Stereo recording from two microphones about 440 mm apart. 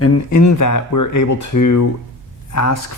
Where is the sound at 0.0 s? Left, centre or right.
Left.